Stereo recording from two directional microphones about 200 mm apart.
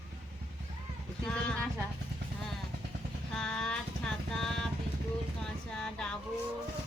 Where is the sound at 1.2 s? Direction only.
5° left (ahead or behind).